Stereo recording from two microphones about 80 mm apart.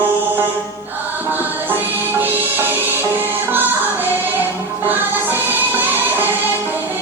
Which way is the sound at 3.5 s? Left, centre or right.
Right.